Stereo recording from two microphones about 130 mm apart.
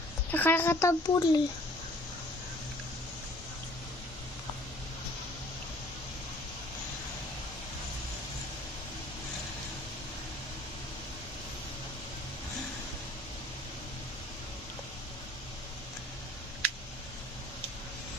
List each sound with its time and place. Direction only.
0.3 s speech: 15° left (ahead or behind); by 1.4 s 30° left (ahead or behind)